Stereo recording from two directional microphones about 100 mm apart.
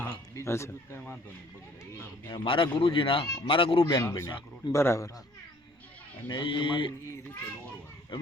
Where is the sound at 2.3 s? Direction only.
60° left (ahead or behind).